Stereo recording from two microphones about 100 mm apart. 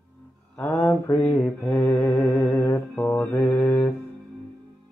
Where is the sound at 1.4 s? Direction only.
10° left (ahead or behind).